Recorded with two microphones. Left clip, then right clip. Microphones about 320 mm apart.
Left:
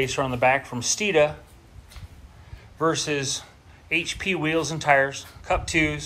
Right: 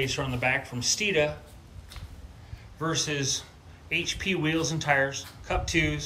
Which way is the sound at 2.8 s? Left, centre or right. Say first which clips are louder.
Left 5 dB; centre.